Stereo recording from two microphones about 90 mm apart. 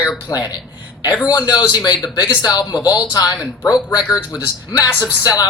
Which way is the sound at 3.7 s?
10° right (ahead or behind).